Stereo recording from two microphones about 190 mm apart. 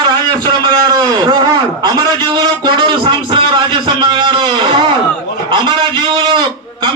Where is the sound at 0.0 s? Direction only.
20° right (ahead or behind).